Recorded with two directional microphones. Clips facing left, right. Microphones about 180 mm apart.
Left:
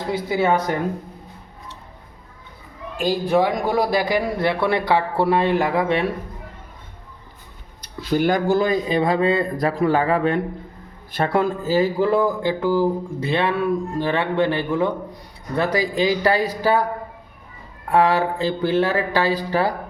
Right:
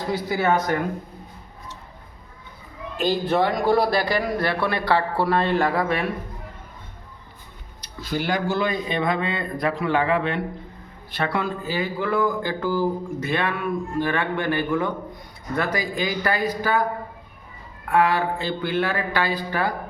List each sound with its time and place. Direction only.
3.0 s a man's voice: 10° left (ahead or behind)
8.1 s speech: 50° left (ahead or behind); by 16.8 s 35° left (ahead or behind)
17.9 s speech: 40° left (ahead or behind)